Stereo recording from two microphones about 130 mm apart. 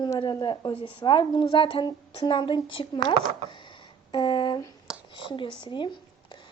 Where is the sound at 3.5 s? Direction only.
35° left (ahead or behind).